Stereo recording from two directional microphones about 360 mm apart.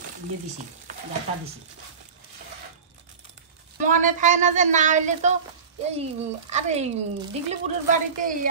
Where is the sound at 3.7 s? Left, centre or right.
Right.